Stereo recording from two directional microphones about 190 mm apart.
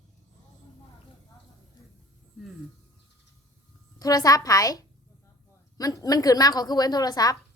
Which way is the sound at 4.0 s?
20° left (ahead or behind).